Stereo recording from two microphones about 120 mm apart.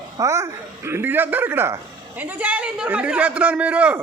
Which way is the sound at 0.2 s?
25° right (ahead or behind).